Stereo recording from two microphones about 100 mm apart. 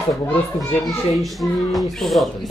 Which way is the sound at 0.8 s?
Centre (ahead or behind).